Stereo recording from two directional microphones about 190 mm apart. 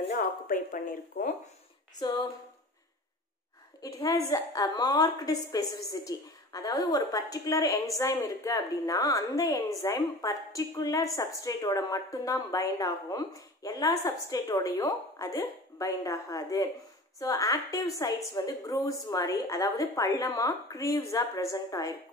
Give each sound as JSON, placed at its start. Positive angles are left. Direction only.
{"t": 0.1, "sound": "speech", "side_deg": 45}
{"t": 2.0, "sound": "a woman's voice", "side_deg": 20}
{"t": 3.8, "sound": "a woman's voice", "side_deg": 15}